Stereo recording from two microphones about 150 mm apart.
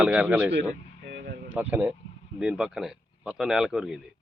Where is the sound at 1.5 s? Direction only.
10° right (ahead or behind).